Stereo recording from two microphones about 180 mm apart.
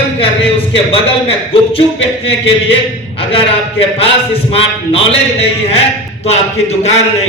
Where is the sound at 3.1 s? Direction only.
30° left (ahead or behind).